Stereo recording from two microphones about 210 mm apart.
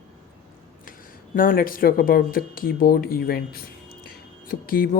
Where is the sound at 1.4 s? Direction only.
40° left (ahead or behind).